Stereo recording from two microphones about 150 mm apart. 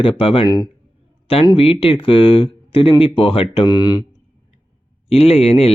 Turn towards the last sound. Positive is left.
turn(degrees=40)  # may be behind; listen again after turning